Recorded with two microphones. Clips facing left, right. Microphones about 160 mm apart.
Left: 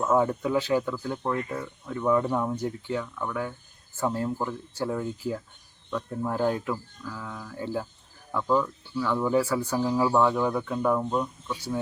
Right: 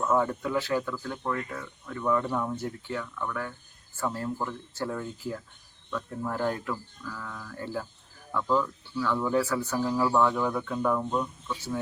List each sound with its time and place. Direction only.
0.0 s speech: 15° left (ahead or behind)